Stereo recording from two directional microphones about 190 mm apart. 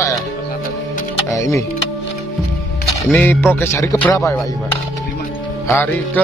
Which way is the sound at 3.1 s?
10° left (ahead or behind).